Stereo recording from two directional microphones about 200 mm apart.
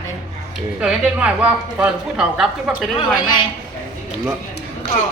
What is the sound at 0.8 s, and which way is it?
A woman's voice, 5° right (ahead or behind).